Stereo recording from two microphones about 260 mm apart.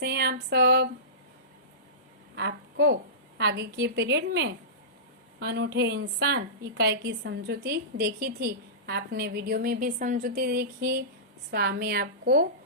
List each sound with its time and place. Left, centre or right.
0.0 s a woman's voice: right
2.3 s a woman's voice: right